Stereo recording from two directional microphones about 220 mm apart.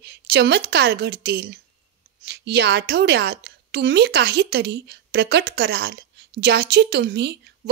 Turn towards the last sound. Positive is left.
turn(degrees=-50)  # may be behind; listen again after turning